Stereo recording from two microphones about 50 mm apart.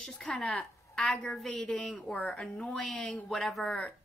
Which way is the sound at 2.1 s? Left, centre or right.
Left.